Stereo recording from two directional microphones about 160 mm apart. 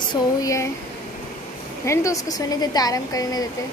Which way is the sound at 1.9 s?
20° left (ahead or behind).